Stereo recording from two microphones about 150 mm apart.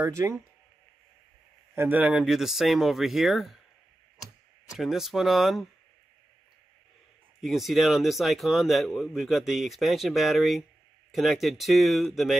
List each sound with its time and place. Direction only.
0.0 s speech: 20° right (ahead or behind)
1.8 s speech: 10° right (ahead or behind)
4.7 s speech: centre (ahead or behind)
7.4 s speech: centre (ahead or behind)